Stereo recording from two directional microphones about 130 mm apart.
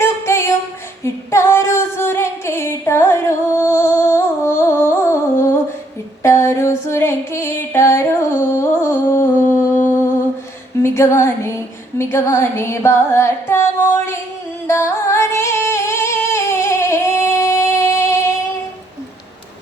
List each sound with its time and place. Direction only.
0.0 s a sound: 20° left (ahead or behind)
1.0 s singing: 20° left (ahead or behind)
6.2 s female singing: 20° left (ahead or behind)
10.8 s a sound: 20° left (ahead or behind)
11.9 s music: 20° left (ahead or behind)
14.7 s singing: 20° left (ahead or behind)